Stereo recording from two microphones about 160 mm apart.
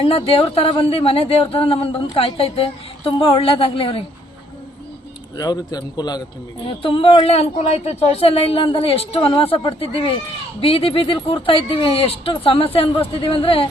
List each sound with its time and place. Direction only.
0.0 s speech: 35° left (ahead or behind)
5.4 s a man's voice: 25° left (ahead or behind)